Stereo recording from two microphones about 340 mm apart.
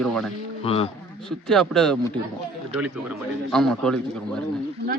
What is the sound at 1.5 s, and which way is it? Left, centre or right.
Speech, centre.